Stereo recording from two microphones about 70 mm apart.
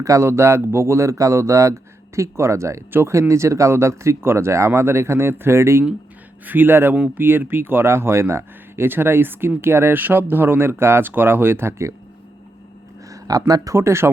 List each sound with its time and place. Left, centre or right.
0.0 s speech: right
13.1 s a sound: right
13.7 s speech: right